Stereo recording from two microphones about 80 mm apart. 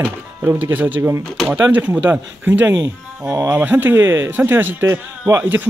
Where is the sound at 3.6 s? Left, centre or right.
Right.